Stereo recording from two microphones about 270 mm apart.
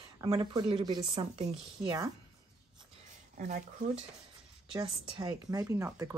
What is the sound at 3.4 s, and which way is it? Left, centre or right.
Speech, right.